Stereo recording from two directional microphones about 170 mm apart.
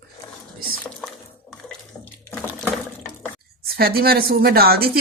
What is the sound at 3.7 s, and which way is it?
A woman's voice, 65° right (ahead or behind).